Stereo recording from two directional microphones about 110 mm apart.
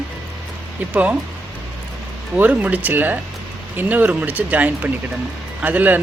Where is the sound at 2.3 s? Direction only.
15° right (ahead or behind).